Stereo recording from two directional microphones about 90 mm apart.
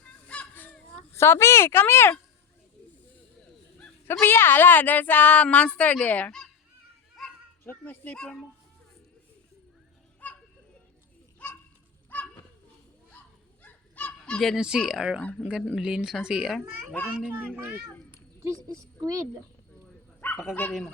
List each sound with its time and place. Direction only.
0.3 s fowl: 15° left (ahead or behind)
3.4 s a sound: 10° left (ahead or behind)
4.0 s speech: 30° left (ahead or behind)
7.2 s children playing: centre (ahead or behind)
7.6 s speech: 20° left (ahead or behind)
10.2 s children playing: 15° left (ahead or behind)
11.4 s bird: 15° left (ahead or behind)
12.1 s children playing: 20° left (ahead or behind)
13.6 s honk: 15° left (ahead or behind)
14.5 s speech: 10° right (ahead or behind)
17.3 s a child's voice: 20° right (ahead or behind)
18.7 s a woman's voice: 40° right (ahead or behind)
20.2 s dog: 25° left (ahead or behind)